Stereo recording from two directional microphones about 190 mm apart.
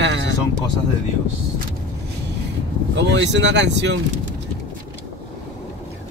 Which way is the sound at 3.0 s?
70° right (ahead or behind).